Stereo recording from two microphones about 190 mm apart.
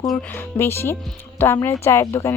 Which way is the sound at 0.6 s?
10° left (ahead or behind).